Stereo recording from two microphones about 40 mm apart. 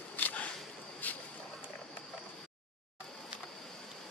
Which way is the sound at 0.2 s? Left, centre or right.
Left.